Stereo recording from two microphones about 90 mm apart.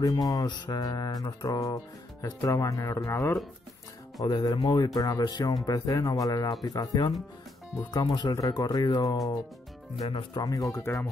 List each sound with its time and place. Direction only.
0.0 s music: 40° left (ahead or behind)
2.2 s speech: 40° left (ahead or behind)
4.2 s music: 50° left (ahead or behind)
10.4 s speech: 40° left (ahead or behind)